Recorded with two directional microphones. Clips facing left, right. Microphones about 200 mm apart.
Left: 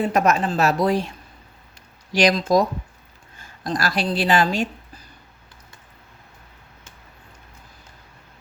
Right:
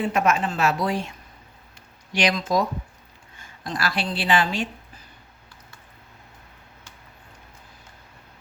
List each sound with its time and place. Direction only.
0.0 s a woman's voice: 40° left (ahead or behind)
2.1 s a woman's voice: 40° left (ahead or behind)